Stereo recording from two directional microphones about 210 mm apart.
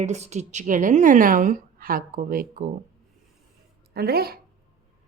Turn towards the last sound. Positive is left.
turn(degrees=-50)  # may be behind; listen again after turning